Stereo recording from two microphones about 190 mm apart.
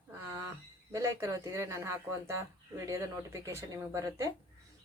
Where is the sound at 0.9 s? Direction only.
15° right (ahead or behind).